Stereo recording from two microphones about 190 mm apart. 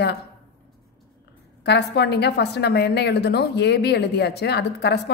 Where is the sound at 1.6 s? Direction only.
60° left (ahead or behind).